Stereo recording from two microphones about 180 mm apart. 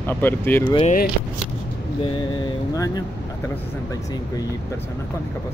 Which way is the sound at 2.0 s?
25° left (ahead or behind).